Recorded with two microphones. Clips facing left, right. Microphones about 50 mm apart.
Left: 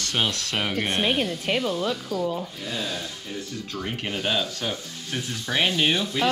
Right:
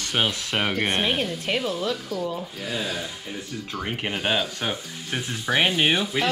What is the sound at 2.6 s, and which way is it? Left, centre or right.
Speech, centre.